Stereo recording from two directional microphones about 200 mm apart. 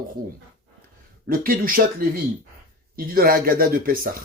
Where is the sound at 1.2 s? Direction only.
45° right (ahead or behind).